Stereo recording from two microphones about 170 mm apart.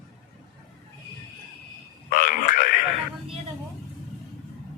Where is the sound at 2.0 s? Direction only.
55° left (ahead or behind).